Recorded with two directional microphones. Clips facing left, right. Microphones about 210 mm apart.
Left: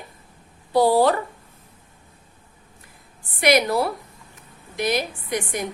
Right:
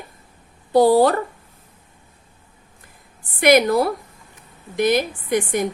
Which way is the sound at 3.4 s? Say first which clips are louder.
Right 4 dB; 50° right (ahead or behind).